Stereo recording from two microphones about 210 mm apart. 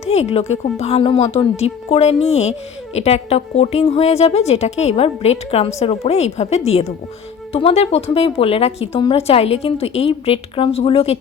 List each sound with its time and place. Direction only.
0.0 s speech: 30° left (ahead or behind)